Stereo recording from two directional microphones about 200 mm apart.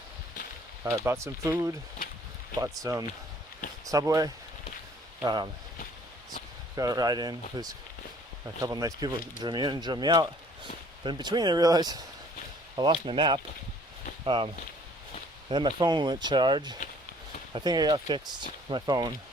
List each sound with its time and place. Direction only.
0.9 s speech: 15° right (ahead or behind)
6.7 s speech: 20° right (ahead or behind)